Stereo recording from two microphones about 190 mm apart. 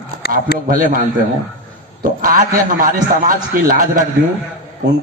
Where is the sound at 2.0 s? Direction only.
45° right (ahead or behind).